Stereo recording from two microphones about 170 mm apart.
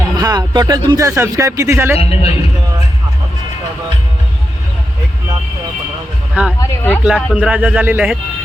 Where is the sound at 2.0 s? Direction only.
35° left (ahead or behind).